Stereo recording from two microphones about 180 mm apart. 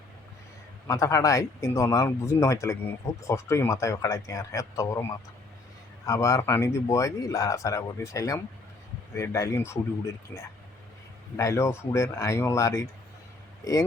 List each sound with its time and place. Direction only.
0.9 s speech: 15° left (ahead or behind)
6.1 s speech: 15° left (ahead or behind)